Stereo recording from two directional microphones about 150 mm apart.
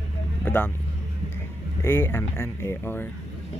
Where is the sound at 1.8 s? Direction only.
15° left (ahead or behind).